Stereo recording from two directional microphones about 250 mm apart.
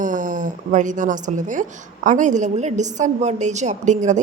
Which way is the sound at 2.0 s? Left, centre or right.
Right.